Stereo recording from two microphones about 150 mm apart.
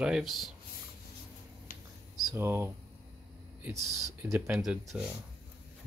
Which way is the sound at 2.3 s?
15° right (ahead or behind).